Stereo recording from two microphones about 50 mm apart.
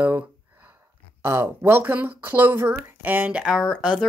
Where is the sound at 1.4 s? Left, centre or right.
Right.